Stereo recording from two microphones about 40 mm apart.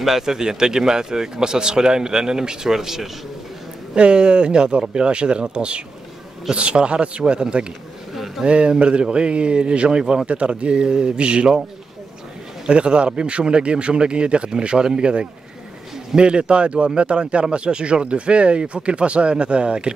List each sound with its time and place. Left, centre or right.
0.0 s speech: centre
3.9 s speech: right
8.1 s a sound: centre
8.5 s speech: right
12.6 s speech: right